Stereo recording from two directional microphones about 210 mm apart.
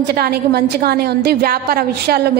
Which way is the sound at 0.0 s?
50° right (ahead or behind).